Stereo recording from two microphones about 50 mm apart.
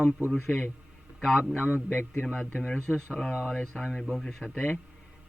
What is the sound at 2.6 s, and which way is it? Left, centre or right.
Speech, left.